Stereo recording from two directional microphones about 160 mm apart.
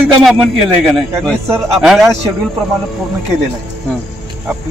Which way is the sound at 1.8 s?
Centre (ahead or behind).